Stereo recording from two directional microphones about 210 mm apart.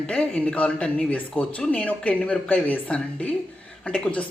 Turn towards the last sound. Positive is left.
turn(degrees=5)  # may be behind; listen again after turning